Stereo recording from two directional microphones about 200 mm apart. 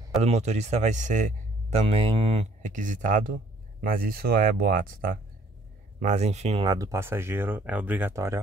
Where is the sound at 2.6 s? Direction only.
40° right (ahead or behind).